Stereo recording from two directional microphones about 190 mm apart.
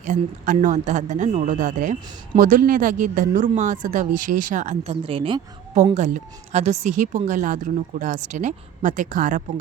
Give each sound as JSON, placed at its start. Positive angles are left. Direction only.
{"t": 0.0, "sound": "speech", "side_deg": -45}
{"t": 6.5, "sound": "speech", "side_deg": -35}